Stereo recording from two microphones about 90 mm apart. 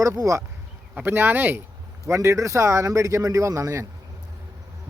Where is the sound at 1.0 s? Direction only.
25° right (ahead or behind).